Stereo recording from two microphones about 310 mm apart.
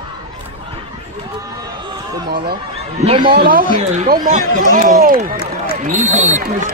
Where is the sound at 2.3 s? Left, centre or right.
Right.